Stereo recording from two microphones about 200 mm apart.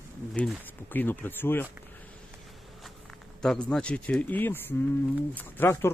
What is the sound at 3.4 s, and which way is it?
Speech, 5° left (ahead or behind).